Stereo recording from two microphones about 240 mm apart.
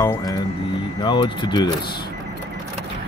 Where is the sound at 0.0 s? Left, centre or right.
Centre.